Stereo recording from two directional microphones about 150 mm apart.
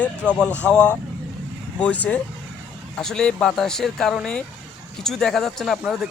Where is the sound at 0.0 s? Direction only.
5° left (ahead or behind).